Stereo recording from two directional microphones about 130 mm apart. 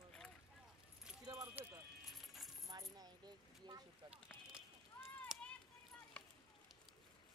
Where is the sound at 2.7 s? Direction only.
30° right (ahead or behind).